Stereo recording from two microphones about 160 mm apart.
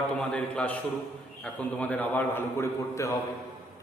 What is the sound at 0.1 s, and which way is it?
A man's voice, 10° left (ahead or behind).